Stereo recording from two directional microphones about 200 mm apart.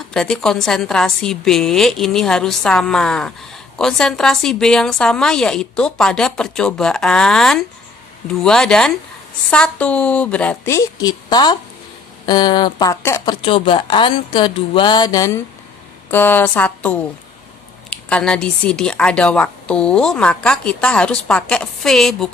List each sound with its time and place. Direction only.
0.1 s a woman's voice: 5° left (ahead or behind)
13.4 s a woman's voice: 25° left (ahead or behind); by 22.3 s centre (ahead or behind)